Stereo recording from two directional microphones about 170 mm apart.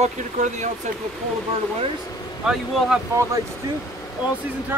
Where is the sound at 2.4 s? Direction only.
5° right (ahead or behind).